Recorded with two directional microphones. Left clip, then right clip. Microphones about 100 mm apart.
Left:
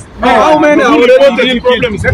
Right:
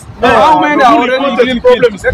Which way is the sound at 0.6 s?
35° right (ahead or behind).